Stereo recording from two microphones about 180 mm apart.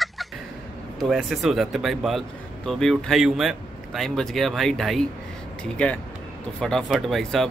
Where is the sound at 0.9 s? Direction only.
Centre (ahead or behind).